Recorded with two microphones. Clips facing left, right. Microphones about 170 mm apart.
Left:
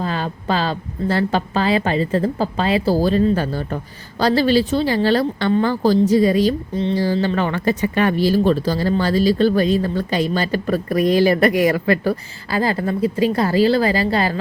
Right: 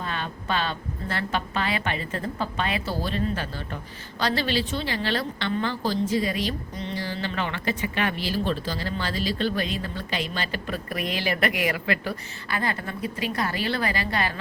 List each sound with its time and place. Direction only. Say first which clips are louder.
0.0 s a woman's voice: left 8 dB; 35° left (ahead or behind)